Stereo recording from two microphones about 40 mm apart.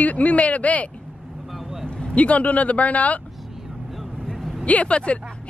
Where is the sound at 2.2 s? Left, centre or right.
Left.